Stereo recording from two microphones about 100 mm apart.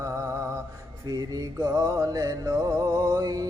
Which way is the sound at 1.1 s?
35° right (ahead or behind).